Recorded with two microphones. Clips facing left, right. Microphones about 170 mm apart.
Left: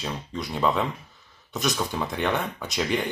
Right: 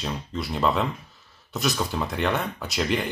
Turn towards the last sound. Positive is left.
turn(degrees=0)  # may be behind; listen again after turning